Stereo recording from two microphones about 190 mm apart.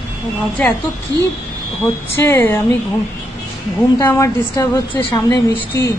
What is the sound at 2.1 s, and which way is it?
Speech, 15° left (ahead or behind).